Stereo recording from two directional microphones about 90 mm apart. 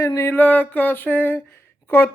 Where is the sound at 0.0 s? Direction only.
35° left (ahead or behind).